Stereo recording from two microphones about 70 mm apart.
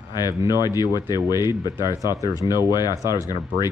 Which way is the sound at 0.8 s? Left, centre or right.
Left.